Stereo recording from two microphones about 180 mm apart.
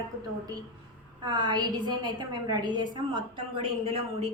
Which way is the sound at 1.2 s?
25° right (ahead or behind).